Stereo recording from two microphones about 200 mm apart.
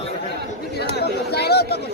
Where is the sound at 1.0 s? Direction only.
55° left (ahead or behind).